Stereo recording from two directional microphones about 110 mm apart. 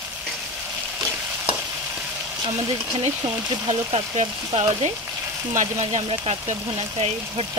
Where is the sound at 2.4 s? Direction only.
50° right (ahead or behind).